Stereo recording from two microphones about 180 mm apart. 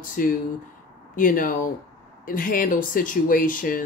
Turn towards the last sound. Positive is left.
turn(degrees=50)  # may be behind; listen again after turning